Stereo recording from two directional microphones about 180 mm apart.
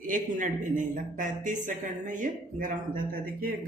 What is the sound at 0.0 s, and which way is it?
Speech, 45° right (ahead or behind).